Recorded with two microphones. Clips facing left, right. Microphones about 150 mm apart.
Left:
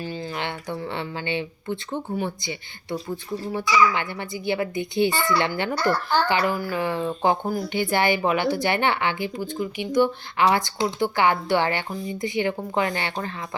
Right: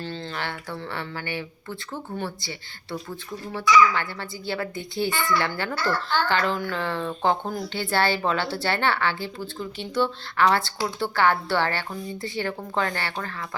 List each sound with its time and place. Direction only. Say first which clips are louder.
0.0 s speech: left 2 dB; 15° left (ahead or behind)